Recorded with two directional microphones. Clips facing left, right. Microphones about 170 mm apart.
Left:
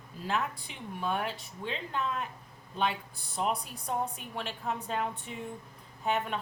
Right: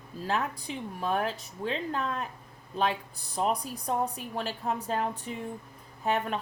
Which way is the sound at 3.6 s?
35° right (ahead or behind).